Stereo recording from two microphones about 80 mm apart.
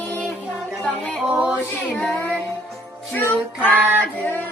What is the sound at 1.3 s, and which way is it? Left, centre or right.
Female singing, centre.